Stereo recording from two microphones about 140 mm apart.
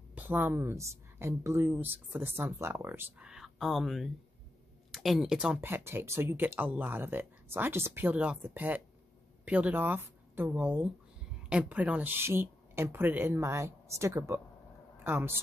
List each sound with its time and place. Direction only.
0.1 s a woman's voice: 15° right (ahead or behind)